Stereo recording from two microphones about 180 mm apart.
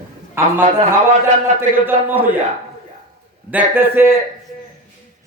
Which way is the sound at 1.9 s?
10° right (ahead or behind).